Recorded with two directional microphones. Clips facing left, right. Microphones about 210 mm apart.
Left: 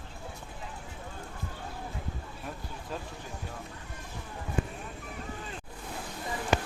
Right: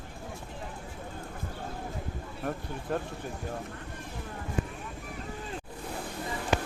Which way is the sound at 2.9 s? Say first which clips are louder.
Right 7 dB; 60° right (ahead or behind).